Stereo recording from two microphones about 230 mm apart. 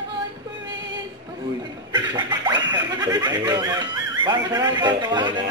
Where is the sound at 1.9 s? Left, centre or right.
Centre.